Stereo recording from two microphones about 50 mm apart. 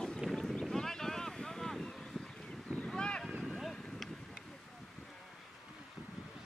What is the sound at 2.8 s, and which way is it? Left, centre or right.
Boat, centre.